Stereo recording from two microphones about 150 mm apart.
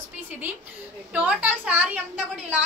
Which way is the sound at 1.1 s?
10° right (ahead or behind).